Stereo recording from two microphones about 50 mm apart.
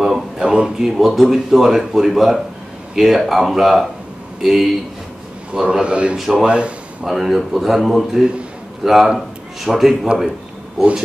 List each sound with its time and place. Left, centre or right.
0.0 s a sound: centre
0.7 s speech: centre
5.5 s a man's voice: centre
6.1 s speech: centre
7.1 s a man's voice: centre